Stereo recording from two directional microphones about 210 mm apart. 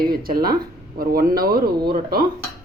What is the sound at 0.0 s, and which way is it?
Speech, 45° right (ahead or behind).